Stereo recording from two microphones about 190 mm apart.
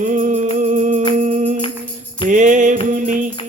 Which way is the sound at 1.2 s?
40° right (ahead or behind).